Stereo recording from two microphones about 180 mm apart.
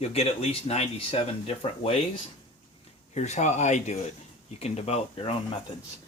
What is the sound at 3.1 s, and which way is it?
Speech, 40° left (ahead or behind).